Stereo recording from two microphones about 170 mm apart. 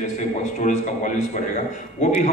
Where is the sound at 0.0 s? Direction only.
45° left (ahead or behind).